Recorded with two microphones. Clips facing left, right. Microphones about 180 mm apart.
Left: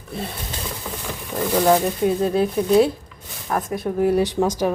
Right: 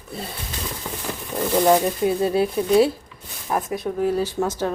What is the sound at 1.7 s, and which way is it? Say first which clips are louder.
Speech: even; 5° right (ahead or behind).